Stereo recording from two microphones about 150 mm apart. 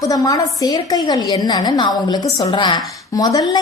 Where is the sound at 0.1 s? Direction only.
25° left (ahead or behind).